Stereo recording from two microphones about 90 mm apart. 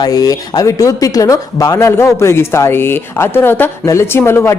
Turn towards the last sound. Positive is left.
turn(degrees=30)  # may be behind; listen again after turning